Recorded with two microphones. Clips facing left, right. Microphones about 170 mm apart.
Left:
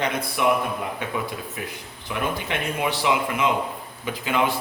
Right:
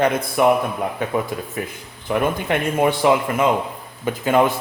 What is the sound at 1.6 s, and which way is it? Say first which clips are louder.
Speech: right 5 dB; 50° right (ahead or behind).